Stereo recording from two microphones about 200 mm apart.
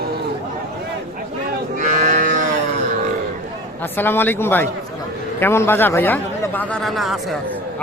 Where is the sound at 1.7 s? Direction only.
40° right (ahead or behind).